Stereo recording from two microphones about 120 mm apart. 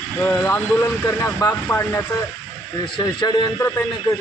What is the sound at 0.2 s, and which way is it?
A man's voice, 15° left (ahead or behind).